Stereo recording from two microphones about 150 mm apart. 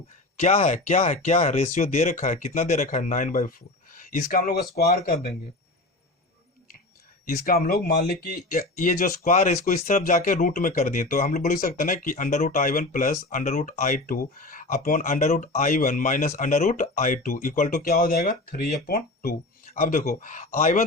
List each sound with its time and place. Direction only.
0.3 s speech: 50° left (ahead or behind); by 5.3 s 75° left (ahead or behind)
7.3 s speech: 75° left (ahead or behind); by 20.8 s 50° left (ahead or behind)